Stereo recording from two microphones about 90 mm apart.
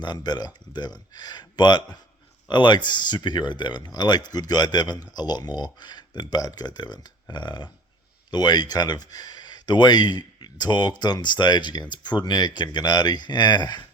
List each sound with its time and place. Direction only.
0.0 s speech: 50° left (ahead or behind)